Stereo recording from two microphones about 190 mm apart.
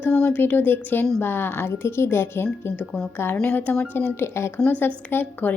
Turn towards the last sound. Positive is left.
turn(degrees=10)  # may be behind; listen again after turning